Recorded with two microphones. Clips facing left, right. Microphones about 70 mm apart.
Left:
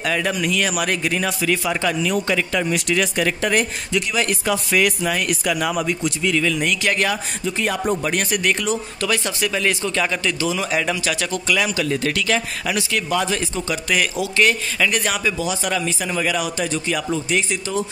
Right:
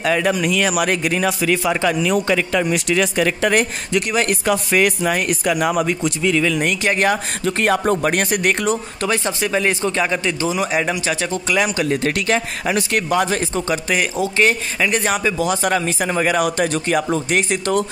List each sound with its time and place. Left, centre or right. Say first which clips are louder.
0.0 s a man's voice: right 4 dB; right
3.4 s speech: right 3 dB; right
6.0 s speech: right 2 dB; right
6.5 s a man's voice: right 2 dB; right
7.4 s speech: right 5 dB; right
8.0 s speech: right 3 dB; right
9.1 s a man's voice: right 3 dB; right
13.8 s speech: right 2 dB; right
15.3 s speech: right 4 dB; right
16.4 s speech: right 4 dB; right